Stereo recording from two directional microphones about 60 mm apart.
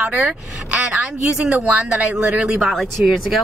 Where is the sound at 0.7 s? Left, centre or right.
Right.